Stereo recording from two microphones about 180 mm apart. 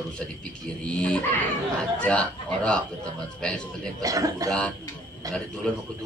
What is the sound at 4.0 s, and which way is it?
Speech, 20° right (ahead or behind).